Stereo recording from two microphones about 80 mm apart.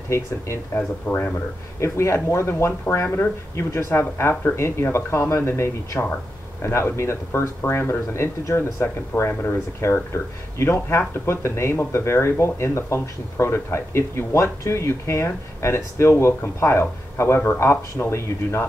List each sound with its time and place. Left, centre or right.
0.7 s speech: centre
1.8 s speech: left
9.8 s speech: left